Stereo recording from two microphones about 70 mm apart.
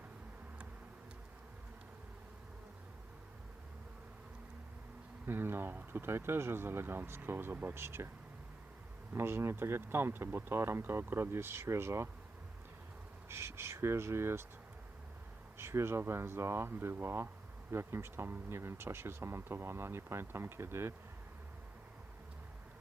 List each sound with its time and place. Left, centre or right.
5.2 s speech: right
9.1 s speech: right
13.2 s speech: right
15.5 s speech: right